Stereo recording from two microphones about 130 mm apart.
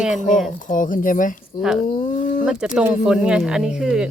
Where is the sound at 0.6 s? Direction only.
90° left.